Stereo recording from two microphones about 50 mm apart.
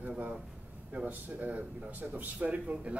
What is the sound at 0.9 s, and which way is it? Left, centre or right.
Speech, right.